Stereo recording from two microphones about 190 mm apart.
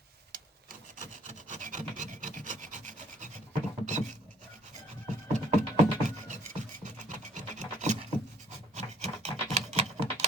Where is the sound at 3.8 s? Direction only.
40° right (ahead or behind).